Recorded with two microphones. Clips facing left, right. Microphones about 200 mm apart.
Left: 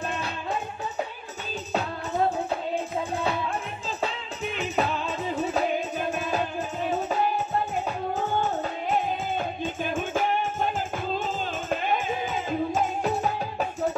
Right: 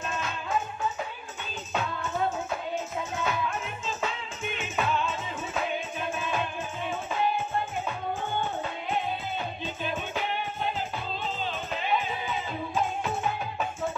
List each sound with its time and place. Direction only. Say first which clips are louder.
1.7 s music: left 2 dB; 35° left (ahead or behind)
4.6 s music: left 2 dB; 35° left (ahead or behind)